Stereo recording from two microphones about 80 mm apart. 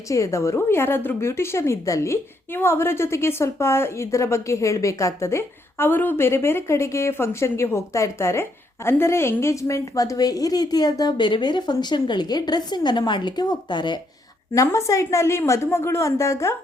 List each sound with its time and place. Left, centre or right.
0.1 s a woman's voice: left
2.5 s a woman's voice: left
14.5 s a woman's voice: left